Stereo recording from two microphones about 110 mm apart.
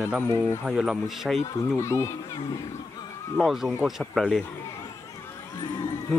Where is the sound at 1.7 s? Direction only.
25° left (ahead or behind).